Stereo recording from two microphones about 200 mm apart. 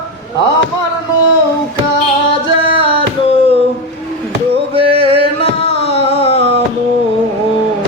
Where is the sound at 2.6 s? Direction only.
30° right (ahead or behind).